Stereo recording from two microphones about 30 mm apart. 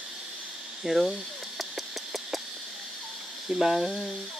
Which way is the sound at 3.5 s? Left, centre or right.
Right.